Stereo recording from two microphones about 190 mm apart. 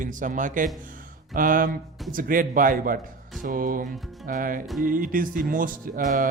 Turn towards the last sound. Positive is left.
turn(degrees=-45)  # may be behind; listen again after turning